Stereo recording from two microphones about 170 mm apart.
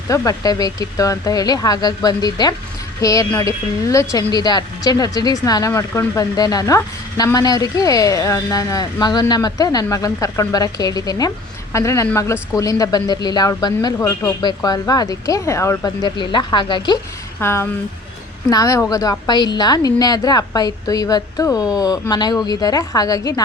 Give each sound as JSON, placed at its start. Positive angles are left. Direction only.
{"t": 0.1, "sound": "a woman's voice", "side_deg": 20}
{"t": 17.4, "sound": "a woman's voice", "side_deg": 15}